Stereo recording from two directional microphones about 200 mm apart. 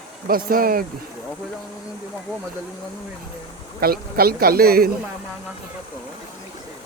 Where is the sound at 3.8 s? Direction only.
50° right (ahead or behind).